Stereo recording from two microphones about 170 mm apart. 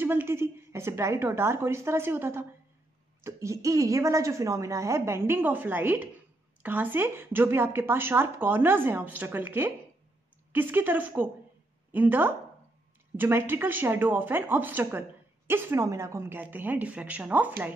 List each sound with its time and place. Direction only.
0.0 s speech: 15° right (ahead or behind)